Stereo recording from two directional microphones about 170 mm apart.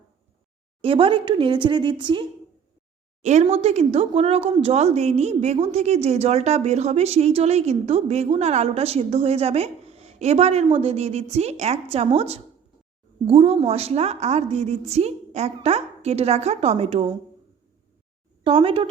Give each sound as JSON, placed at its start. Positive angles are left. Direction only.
{"t": 0.8, "sound": "a woman's voice", "side_deg": -30}
{"t": 3.4, "sound": "a woman's voice", "side_deg": -35}
{"t": 18.4, "sound": "a woman's voice", "side_deg": -35}